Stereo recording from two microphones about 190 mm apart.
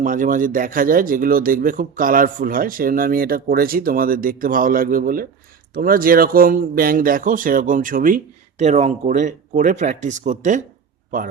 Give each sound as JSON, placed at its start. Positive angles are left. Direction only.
{"t": 0.0, "sound": "speech", "side_deg": -45}